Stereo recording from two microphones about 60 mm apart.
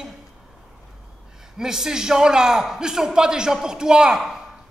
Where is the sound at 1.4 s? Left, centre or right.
Centre.